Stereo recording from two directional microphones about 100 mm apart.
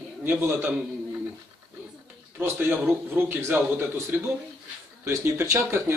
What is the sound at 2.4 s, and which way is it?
A man's voice, 20° right (ahead or behind).